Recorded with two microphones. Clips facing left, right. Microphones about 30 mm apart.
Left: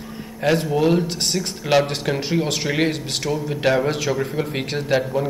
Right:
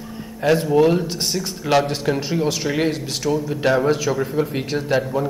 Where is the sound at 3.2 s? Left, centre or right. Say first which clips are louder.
Right 4 dB; centre.